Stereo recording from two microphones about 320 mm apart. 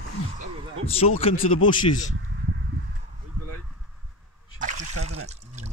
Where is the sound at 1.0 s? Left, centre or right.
Centre.